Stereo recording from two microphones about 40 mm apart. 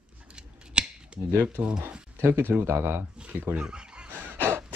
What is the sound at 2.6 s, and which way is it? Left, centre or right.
Speech, right.